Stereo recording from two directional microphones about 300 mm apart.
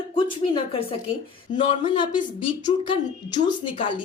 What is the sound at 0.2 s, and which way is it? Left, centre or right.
Speech, centre.